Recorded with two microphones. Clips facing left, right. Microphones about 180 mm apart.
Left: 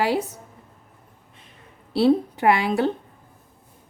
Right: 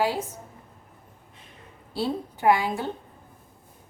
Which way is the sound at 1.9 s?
70° left (ahead or behind).